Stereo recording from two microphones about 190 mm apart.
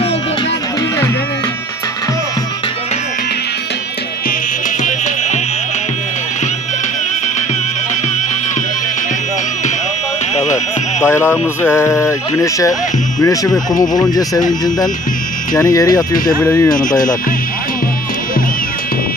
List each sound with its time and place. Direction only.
11.0 s speech: 10° left (ahead or behind)
15.5 s speech: 20° left (ahead or behind)